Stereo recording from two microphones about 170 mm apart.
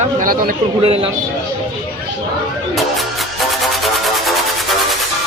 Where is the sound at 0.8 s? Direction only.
35° right (ahead or behind).